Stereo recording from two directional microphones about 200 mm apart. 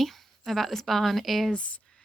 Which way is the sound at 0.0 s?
Centre (ahead or behind).